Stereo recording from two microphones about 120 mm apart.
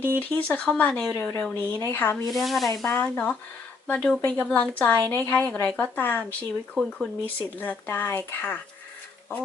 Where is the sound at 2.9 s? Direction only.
15° left (ahead or behind).